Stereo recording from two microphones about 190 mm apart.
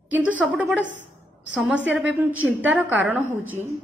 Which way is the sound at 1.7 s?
75° right (ahead or behind).